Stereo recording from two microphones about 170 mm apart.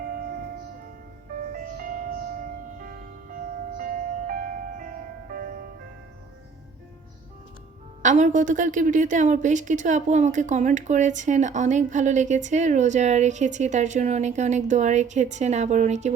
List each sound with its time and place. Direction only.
0.0 s music: 60° right (ahead or behind)
1.5 s music: 55° right (ahead or behind)
8.0 s a woman's voice: 45° right (ahead or behind)